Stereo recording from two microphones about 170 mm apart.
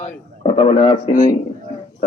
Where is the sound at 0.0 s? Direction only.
35° left (ahead or behind).